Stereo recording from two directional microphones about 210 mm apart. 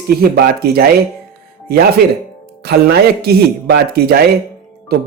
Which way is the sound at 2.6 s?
50° right (ahead or behind).